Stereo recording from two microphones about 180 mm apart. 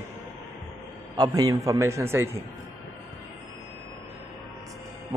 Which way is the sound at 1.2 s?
20° right (ahead or behind).